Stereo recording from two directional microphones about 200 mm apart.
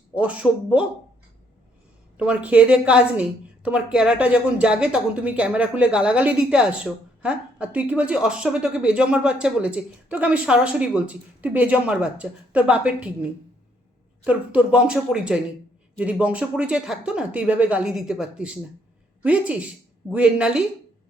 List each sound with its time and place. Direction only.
0.2 s speech: 5° right (ahead or behind)
2.1 s a woman's voice: 5° right (ahead or behind)
14.3 s a woman's voice: 5° right (ahead or behind)